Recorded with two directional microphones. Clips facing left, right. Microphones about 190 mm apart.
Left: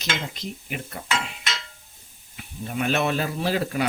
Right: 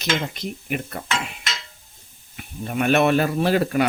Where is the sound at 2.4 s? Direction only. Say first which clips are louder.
Right 4 dB; 55° right (ahead or behind).